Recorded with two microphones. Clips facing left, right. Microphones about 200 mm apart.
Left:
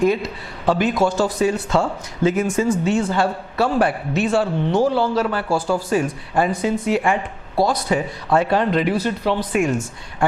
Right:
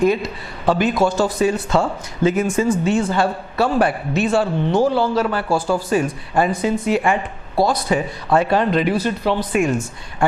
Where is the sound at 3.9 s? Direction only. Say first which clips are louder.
Right 1 dB; 15° right (ahead or behind).